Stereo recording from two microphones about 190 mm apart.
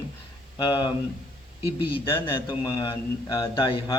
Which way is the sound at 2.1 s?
25° left (ahead or behind).